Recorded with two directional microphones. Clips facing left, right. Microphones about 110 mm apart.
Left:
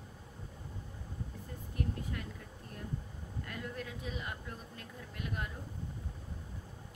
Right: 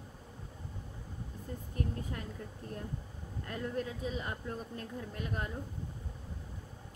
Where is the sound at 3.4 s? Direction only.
35° right (ahead or behind).